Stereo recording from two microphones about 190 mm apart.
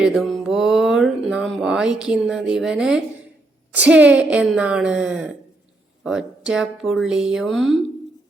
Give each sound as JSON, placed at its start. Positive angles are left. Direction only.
{"t": 0.0, "sound": "music", "side_deg": 0}
{"t": 3.8, "sound": "a woman's voice", "side_deg": -5}
{"t": 6.0, "sound": "music", "side_deg": 0}